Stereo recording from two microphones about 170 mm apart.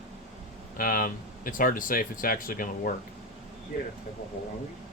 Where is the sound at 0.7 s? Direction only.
55° left (ahead or behind).